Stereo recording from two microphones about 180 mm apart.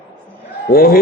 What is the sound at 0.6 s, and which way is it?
Speech, 55° left (ahead or behind).